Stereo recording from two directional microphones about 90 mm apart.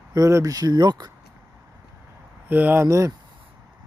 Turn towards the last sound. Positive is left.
turn(degrees=-35)  # may be behind; listen again after turning